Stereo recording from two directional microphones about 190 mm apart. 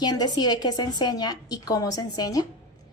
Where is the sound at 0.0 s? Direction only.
20° left (ahead or behind).